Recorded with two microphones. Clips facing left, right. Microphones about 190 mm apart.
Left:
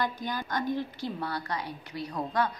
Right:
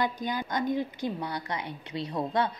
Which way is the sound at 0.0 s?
20° right (ahead or behind).